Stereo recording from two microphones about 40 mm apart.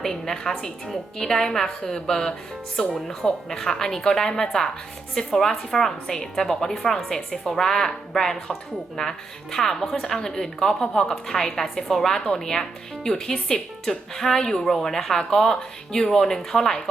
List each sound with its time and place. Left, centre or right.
0.0 s speech: centre